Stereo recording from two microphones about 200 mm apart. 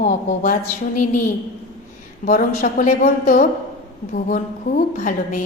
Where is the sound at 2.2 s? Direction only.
40° left (ahead or behind).